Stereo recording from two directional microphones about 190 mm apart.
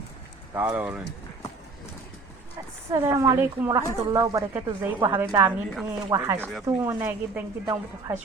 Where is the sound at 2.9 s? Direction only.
15° right (ahead or behind).